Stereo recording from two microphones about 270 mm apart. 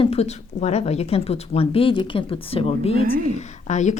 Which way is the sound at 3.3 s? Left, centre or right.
Left.